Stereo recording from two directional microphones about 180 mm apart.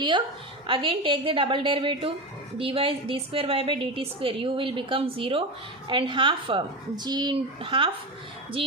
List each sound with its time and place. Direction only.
0.7 s a woman's voice: 30° right (ahead or behind)